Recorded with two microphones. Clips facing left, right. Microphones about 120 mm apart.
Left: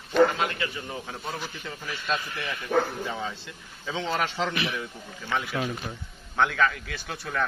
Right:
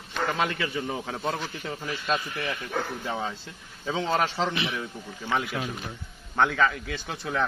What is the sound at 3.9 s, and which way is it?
Speech, 40° right (ahead or behind).